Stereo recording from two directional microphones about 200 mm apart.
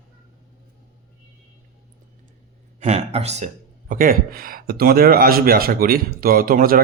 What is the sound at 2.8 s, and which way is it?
Speech, 35° right (ahead or behind).